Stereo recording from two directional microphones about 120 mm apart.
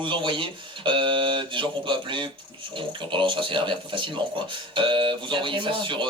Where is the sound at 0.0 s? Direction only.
45° right (ahead or behind).